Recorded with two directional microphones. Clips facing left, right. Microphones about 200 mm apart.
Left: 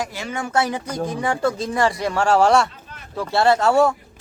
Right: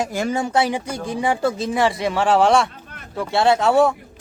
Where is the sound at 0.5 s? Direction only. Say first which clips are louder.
Right 2 dB; 15° right (ahead or behind).